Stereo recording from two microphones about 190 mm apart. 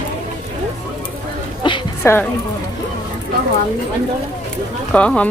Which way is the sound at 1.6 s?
25° left (ahead or behind).